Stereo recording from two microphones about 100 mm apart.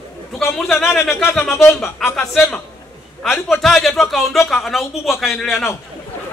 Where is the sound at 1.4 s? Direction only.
25° left (ahead or behind).